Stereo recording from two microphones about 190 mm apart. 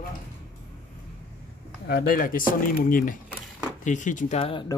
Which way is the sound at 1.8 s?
55° left (ahead or behind).